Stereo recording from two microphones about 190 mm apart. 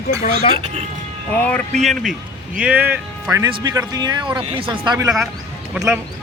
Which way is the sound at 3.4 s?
20° right (ahead or behind).